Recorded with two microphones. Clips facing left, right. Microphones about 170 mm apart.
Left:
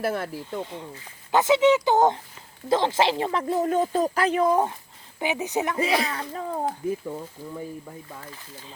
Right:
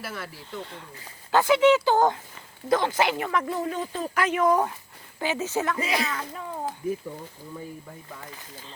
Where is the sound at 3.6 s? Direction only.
45° left (ahead or behind); by 4.7 s 25° left (ahead or behind).